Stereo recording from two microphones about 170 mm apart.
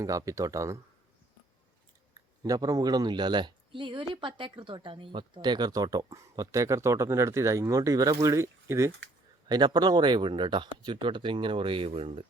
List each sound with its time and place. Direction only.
0.0 s speech: 20° right (ahead or behind)
2.1 s speech: 20° right (ahead or behind)